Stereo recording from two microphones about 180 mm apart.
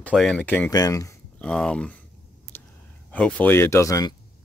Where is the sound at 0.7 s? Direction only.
20° left (ahead or behind).